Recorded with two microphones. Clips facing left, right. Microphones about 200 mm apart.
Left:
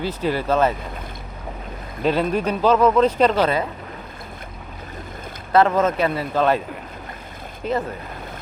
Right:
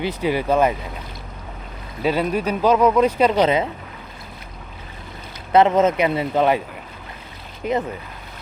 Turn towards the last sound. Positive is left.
turn(degrees=-10)  # may be behind; listen again after turning